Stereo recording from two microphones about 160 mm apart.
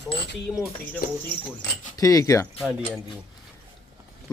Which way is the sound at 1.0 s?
65° left (ahead or behind).